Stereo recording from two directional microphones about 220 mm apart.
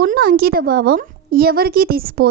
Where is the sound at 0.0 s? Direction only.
40° right (ahead or behind).